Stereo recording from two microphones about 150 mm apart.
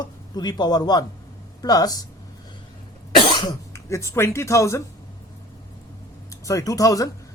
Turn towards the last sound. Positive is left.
turn(degrees=25)  # may be behind; listen again after turning